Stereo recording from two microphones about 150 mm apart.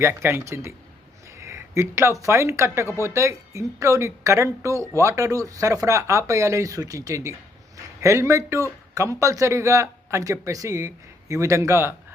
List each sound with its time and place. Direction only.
0.0 s a woman's voice: 15° right (ahead or behind)